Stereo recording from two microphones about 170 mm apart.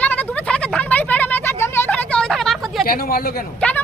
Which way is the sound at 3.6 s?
5° left (ahead or behind).